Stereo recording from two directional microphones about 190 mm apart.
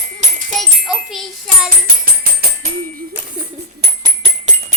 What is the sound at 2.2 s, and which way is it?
Music, 50° right (ahead or behind).